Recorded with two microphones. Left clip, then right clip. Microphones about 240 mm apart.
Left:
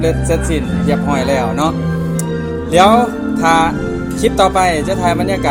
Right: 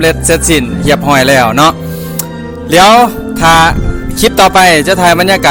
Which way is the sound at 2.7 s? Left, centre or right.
Right.